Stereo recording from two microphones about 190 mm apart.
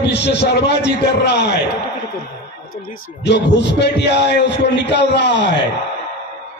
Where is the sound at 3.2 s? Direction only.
65° left (ahead or behind).